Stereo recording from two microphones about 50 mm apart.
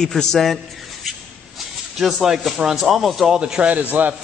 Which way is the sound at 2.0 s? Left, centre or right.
Centre.